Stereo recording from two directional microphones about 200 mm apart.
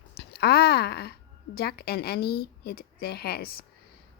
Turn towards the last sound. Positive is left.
turn(degrees=50)  # may be behind; listen again after turning